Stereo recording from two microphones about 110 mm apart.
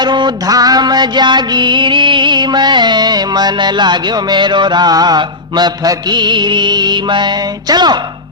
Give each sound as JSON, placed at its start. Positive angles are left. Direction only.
{"t": 0.0, "sound": "music", "side_deg": -40}